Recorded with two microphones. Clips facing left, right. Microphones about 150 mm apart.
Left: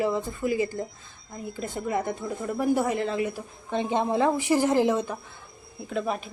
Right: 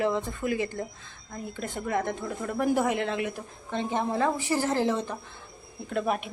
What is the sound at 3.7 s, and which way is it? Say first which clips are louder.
A woman's voice: left 3 dB; 15° left (ahead or behind).